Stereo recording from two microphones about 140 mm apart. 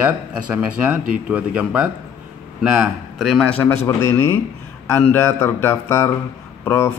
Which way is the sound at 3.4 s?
10° left (ahead or behind).